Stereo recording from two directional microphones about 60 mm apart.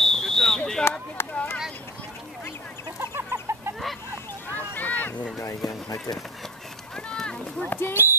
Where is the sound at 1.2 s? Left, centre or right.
Left.